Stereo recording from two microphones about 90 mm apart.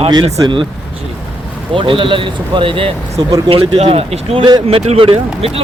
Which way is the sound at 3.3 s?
45° right (ahead or behind).